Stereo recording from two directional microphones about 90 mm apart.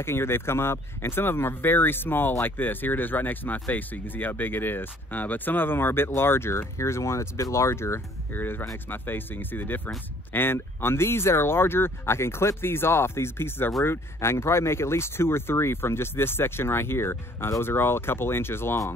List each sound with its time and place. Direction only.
0.0 s speech: 25° left (ahead or behind)